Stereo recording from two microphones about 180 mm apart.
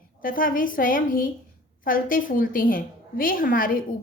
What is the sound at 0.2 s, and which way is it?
A woman's voice, 50° left (ahead or behind).